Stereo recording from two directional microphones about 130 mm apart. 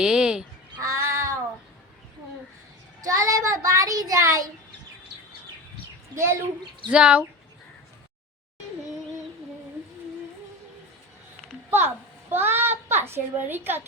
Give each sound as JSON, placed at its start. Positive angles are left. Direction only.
{"t": 0.0, "sound": "honk", "side_deg": -5}
{"t": 0.8, "sound": "child singing", "side_deg": -25}
{"t": 3.0, "sound": "child singing", "side_deg": -25}
{"t": 6.1, "sound": "speech", "side_deg": -20}
{"t": 6.9, "sound": "speech", "side_deg": -10}
{"t": 12.3, "sound": "a child's voice", "side_deg": -15}